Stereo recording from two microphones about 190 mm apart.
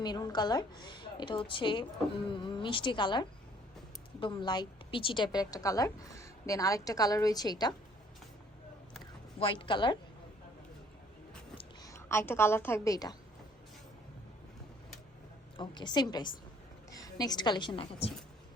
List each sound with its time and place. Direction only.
0.0 s a woman's voice: 20° left (ahead or behind)
9.4 s a woman's voice: 25° left (ahead or behind)
11.5 s a woman's voice: 20° left (ahead or behind)
15.5 s a woman's voice: 25° left (ahead or behind)